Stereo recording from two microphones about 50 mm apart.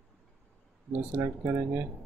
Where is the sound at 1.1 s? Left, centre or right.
Right.